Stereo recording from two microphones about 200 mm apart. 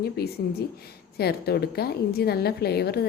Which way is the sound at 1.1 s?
50° left (ahead or behind).